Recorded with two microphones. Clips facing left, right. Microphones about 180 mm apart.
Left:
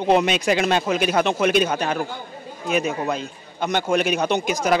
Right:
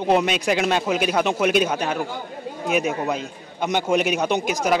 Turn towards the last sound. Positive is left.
turn(degrees=-5)  # may be behind; listen again after turning